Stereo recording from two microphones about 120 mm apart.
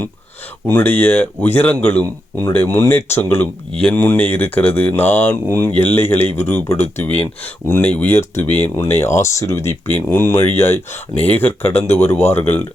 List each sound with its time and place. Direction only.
0.7 s speech: 15° left (ahead or behind)